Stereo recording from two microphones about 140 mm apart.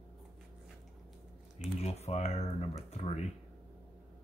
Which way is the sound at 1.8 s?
50° left (ahead or behind).